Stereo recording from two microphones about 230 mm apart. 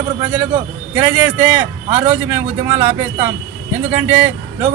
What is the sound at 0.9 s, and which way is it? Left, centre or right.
Speech, centre.